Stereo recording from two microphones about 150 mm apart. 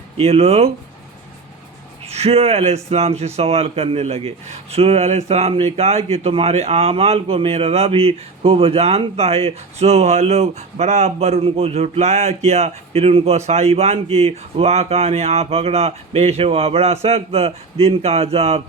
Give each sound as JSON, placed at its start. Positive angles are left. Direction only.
{"t": 0.2, "sound": "speech", "side_deg": -45}
{"t": 2.0, "sound": "speech", "side_deg": -45}